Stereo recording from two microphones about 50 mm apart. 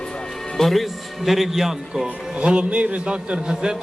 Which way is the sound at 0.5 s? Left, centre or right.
Centre.